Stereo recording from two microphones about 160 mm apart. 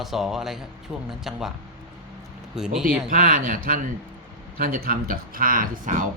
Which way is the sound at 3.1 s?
60° right (ahead or behind).